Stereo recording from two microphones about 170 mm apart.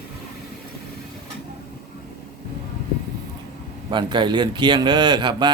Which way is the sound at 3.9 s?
30° right (ahead or behind).